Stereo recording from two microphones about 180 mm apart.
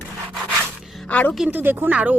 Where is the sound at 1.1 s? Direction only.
10° left (ahead or behind).